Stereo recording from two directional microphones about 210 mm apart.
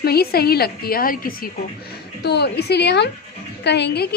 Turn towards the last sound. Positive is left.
turn(degrees=50)  # may be behind; listen again after turning